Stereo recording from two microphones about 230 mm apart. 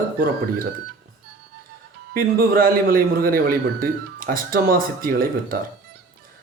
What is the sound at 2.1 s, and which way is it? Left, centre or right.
A man's voice, right.